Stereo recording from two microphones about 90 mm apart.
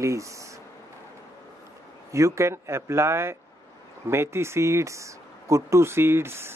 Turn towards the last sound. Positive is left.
turn(degrees=-25)  # may be behind; listen again after turning